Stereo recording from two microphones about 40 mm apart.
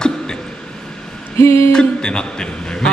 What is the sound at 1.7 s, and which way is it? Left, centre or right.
A man's voice, centre.